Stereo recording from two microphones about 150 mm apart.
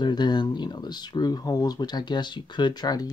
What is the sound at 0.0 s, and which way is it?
Speech, 30° left (ahead or behind).